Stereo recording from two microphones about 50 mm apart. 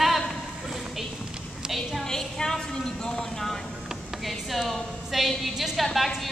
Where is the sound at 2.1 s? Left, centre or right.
Centre.